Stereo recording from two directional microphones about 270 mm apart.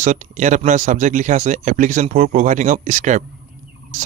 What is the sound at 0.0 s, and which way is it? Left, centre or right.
Speech, right.